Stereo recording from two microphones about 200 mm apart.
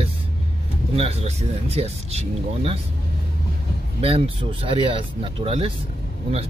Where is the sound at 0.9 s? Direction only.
30° right (ahead or behind).